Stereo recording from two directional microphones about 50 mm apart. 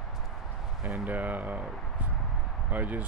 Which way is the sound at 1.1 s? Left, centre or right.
Right.